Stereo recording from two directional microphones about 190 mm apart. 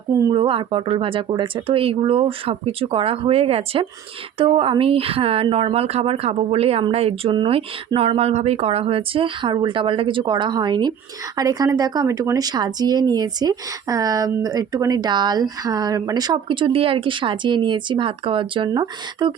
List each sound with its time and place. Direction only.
0.2 s speech: 25° right (ahead or behind)